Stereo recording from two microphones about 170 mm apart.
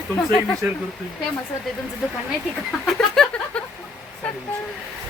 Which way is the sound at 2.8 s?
5° left (ahead or behind).